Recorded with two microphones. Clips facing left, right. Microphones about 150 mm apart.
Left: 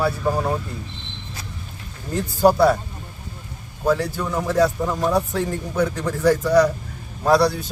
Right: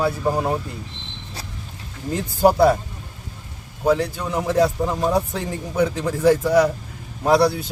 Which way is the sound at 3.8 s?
15° right (ahead or behind).